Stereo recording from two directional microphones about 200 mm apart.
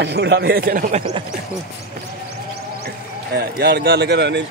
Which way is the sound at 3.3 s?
55° right (ahead or behind).